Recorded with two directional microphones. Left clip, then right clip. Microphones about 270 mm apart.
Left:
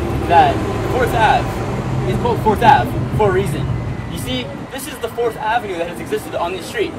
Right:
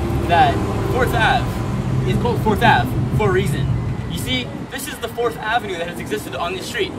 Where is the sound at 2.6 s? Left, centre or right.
Centre.